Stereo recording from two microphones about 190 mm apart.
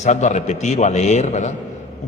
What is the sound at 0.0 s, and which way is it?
A man's voice, 40° left (ahead or behind).